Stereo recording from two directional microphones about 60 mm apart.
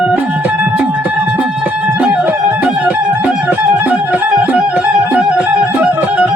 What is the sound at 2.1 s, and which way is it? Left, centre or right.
Music, right.